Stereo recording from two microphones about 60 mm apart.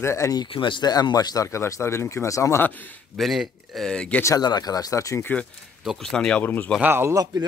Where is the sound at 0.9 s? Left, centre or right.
Left.